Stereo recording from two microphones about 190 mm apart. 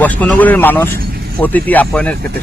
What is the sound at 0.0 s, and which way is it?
Speech, 10° left (ahead or behind).